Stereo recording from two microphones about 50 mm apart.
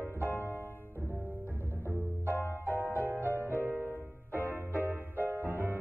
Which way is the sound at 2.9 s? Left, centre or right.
Right.